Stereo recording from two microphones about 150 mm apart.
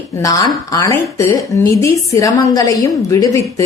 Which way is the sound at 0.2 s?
25° left (ahead or behind).